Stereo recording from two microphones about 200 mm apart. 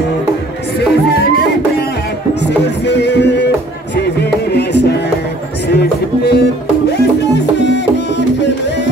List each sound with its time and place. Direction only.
0.7 s music: 50° left (ahead or behind)
2.8 s music: 60° left (ahead or behind)